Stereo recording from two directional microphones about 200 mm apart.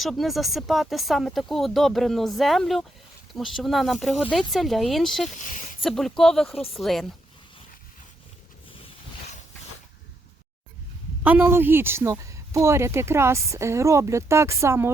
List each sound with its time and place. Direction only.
0.0 s speech: centre (ahead or behind)
5.4 s speech: 40° left (ahead or behind)
5.8 s speech: centre (ahead or behind)
11.2 s a woman's voice: 10° right (ahead or behind)